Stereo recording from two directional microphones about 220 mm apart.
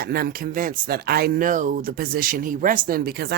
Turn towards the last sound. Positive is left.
turn(degrees=-45)  # may be behind; listen again after turning